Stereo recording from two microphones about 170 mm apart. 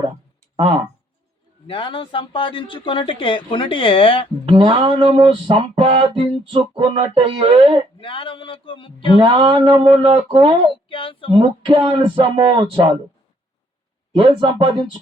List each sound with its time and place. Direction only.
1.6 s speech: 30° left (ahead or behind)
4.4 s music: 30° right (ahead or behind)
7.9 s speech: 30° left (ahead or behind)
9.1 s speech: 30° right (ahead or behind)
10.7 s speech: 30° left (ahead or behind)
11.3 s speech: 30° right (ahead or behind)
14.2 s speech: 30° right (ahead or behind)